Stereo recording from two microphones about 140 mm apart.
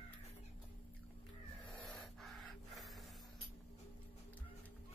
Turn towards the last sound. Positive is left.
turn(degrees=0)  # may be behind; listen again after turning